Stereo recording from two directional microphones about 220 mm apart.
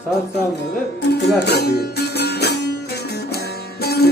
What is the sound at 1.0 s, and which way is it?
Music, 50° left (ahead or behind).